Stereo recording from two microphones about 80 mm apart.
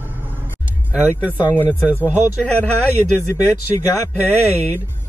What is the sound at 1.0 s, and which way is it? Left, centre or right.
Speech, centre.